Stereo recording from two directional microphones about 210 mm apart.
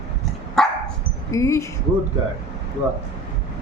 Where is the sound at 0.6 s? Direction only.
5° left (ahead or behind).